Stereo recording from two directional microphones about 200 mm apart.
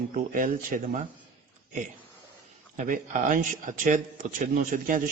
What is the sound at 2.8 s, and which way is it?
A man's voice, 40° right (ahead or behind).